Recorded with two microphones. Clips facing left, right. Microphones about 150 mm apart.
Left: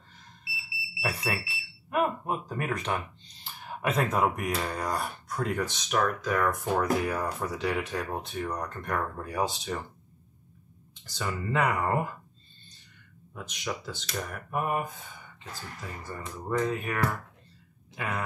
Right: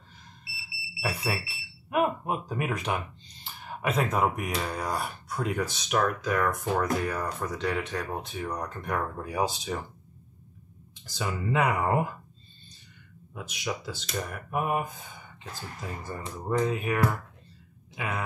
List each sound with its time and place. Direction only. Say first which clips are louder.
1.0 s speech: right 1 dB; 5° right (ahead or behind)
11.1 s speech: right 1 dB; 10° right (ahead or behind)
13.3 s speech: right 1 dB; 10° right (ahead or behind)
15.9 s speech: right 2 dB; 20° right (ahead or behind); by 18.2 s 5° right (ahead or behind)